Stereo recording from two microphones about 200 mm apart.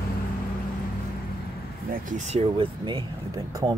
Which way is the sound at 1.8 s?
40° right (ahead or behind).